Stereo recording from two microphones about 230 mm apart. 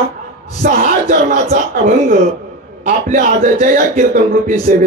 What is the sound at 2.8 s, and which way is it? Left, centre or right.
A man's voice, right.